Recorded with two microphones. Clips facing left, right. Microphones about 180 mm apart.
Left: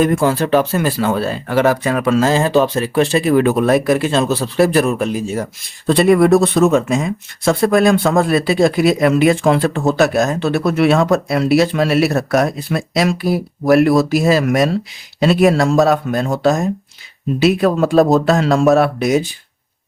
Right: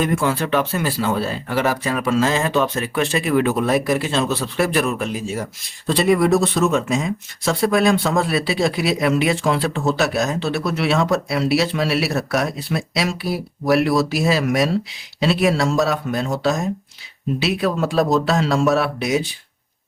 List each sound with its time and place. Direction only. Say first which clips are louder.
0.0 s speech: left 5 dB; 40° left (ahead or behind); by 2.2 s 55° left (ahead or behind)
2.2 s speech: left 5 dB; 35° left (ahead or behind)
3.4 s speech: left 5 dB; 55° left (ahead or behind)
5.8 s speech: left 5 dB; 55° left (ahead or behind)